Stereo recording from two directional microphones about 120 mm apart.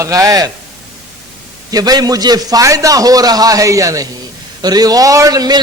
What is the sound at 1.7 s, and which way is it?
A man's voice, 35° right (ahead or behind).